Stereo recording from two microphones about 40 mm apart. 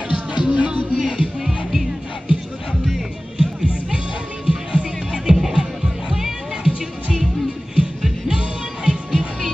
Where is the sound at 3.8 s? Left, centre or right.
Right.